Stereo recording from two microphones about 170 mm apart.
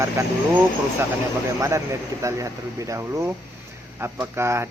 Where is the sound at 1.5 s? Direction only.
15° right (ahead or behind).